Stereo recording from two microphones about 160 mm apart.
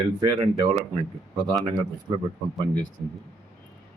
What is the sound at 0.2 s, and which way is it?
Speech, 25° right (ahead or behind).